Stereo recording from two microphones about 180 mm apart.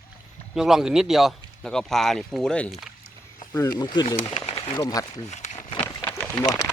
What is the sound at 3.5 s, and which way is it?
Speech, 20° left (ahead or behind).